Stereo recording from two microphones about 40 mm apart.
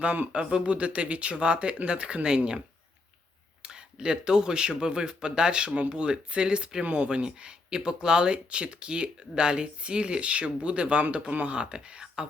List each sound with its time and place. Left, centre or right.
0.0 s speech: right
3.6 s speech: right
11.5 s speech: right